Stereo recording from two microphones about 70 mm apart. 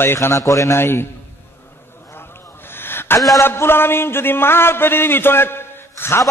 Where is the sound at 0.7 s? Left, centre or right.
Left.